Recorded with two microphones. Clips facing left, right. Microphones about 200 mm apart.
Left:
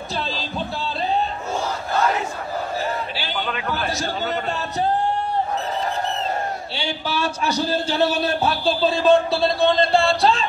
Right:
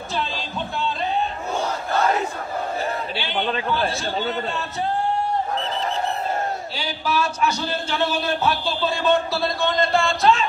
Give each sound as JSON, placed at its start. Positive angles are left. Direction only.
{"t": 6.7, "sound": "a man's voice", "side_deg": 30}